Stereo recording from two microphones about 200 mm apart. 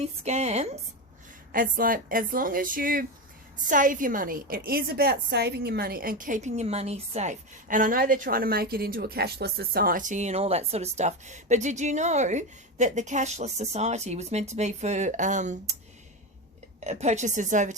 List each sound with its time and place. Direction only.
0.3 s a woman's voice: 35° right (ahead or behind)
16.8 s a woman's voice: 35° right (ahead or behind)